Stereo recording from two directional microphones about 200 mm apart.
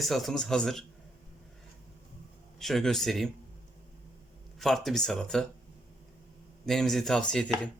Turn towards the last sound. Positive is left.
turn(degrees=5)  # may be behind; listen again after turning